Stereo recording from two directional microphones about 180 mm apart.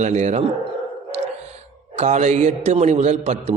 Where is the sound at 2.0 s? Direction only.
40° right (ahead or behind).